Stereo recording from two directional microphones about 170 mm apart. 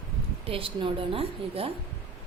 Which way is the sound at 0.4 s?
35° right (ahead or behind).